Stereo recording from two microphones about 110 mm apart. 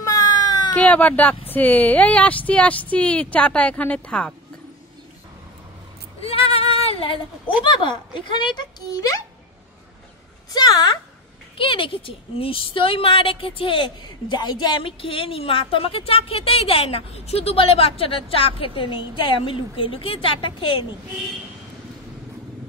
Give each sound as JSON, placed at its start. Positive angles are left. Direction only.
{"t": 0.0, "sound": "cat", "side_deg": 35}
{"t": 0.7, "sound": "speech", "side_deg": 15}
{"t": 6.2, "sound": "speech", "side_deg": 60}
{"t": 10.5, "sound": "a woman's voice", "side_deg": 40}
{"t": 11.5, "sound": "a woman's voice", "side_deg": 55}